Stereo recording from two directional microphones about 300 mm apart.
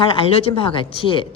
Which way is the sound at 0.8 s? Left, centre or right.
Centre.